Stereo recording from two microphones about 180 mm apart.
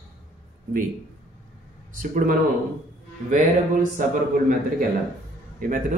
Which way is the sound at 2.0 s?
45° right (ahead or behind).